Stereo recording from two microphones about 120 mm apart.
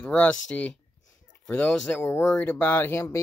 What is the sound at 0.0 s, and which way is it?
Speech, 10° left (ahead or behind).